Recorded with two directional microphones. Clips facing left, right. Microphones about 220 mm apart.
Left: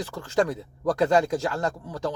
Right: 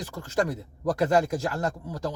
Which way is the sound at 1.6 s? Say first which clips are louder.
Left 1 dB; 10° right (ahead or behind).